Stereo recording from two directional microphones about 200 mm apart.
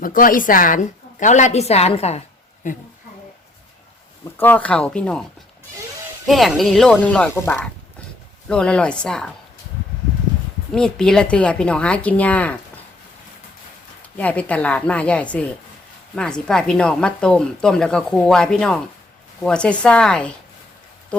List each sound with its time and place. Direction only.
0.0 s a woman's voice: 45° left (ahead or behind)
4.4 s speech: 10° left (ahead or behind)
6.2 s speech: centre (ahead or behind)
10.7 s speech: 5° left (ahead or behind)
14.2 s speech: 5° left (ahead or behind)